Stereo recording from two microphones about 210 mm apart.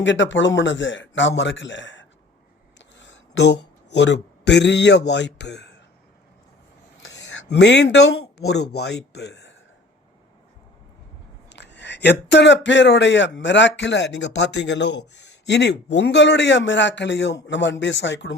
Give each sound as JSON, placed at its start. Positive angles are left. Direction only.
{"t": 0.0, "sound": "speech", "side_deg": 60}
{"t": 2.7, "sound": "a sound", "side_deg": 60}
{"t": 3.9, "sound": "speech", "side_deg": 55}
{"t": 7.5, "sound": "speech", "side_deg": 55}
{"t": 11.4, "sound": "speech", "side_deg": 55}